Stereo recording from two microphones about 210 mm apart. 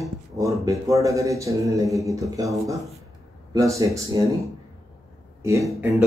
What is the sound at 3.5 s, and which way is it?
Speech, 15° right (ahead or behind).